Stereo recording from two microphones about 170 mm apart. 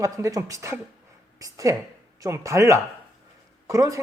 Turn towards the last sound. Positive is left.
turn(degrees=-20)  # may be behind; listen again after turning